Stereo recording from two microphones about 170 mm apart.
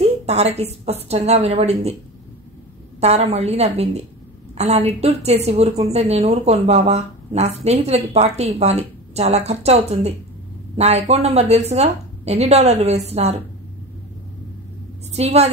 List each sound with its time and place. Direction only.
0.0 s a woman's voice: 40° right (ahead or behind)
3.0 s a woman's voice: 40° right (ahead or behind)
15.1 s a woman's voice: 40° right (ahead or behind)